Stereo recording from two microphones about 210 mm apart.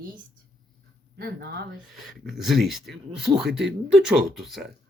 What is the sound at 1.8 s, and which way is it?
Speech, centre (ahead or behind).